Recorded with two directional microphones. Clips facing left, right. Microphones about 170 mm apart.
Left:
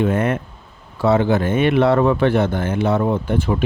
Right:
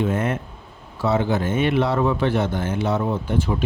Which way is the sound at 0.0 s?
60° left (ahead or behind).